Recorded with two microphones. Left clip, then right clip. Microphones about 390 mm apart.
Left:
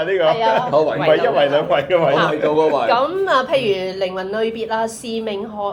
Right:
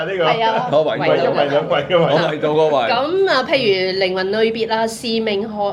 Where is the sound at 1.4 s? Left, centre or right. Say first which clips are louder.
Left 1 dB; centre.